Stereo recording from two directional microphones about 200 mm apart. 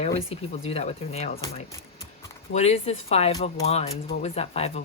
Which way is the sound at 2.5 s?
30° left (ahead or behind).